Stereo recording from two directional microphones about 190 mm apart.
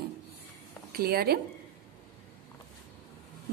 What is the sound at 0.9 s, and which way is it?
Speech, 55° right (ahead or behind).